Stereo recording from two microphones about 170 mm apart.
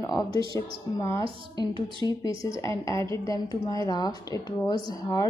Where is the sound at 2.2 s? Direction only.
20° left (ahead or behind).